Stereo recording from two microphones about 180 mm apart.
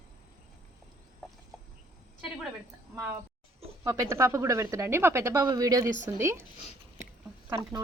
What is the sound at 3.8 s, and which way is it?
Speech, 15° right (ahead or behind).